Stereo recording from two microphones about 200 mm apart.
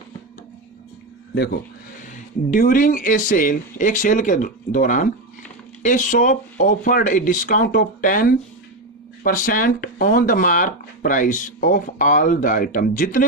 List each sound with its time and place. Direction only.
2.1 s speech: 40° left (ahead or behind)